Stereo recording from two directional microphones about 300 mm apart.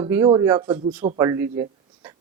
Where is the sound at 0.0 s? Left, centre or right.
Centre.